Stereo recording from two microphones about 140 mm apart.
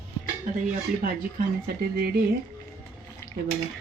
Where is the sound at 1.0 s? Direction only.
90° right.